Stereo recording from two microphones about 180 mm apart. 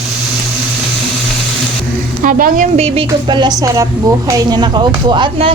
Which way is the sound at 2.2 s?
45° right (ahead or behind).